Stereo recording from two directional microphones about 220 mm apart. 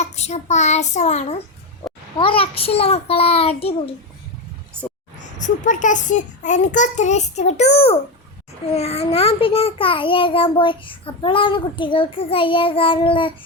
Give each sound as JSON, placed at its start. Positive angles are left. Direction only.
{"t": 0.0, "sound": "a child's voice", "side_deg": 30}
{"t": 5.4, "sound": "a child's voice", "side_deg": 35}